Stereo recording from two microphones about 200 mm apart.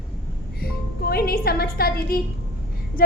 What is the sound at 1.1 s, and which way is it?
A woman's voice, 50° left (ahead or behind).